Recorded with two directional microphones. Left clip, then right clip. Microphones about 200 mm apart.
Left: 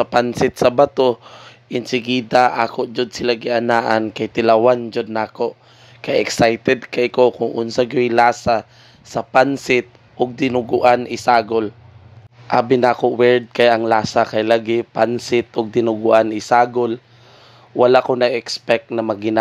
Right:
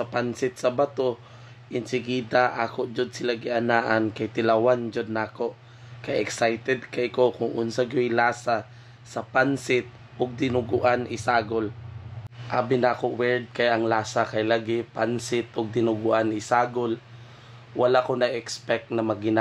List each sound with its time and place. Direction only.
0.0 s speech: 45° left (ahead or behind)